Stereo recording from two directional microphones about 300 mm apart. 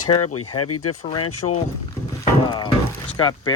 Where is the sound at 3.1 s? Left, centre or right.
Centre.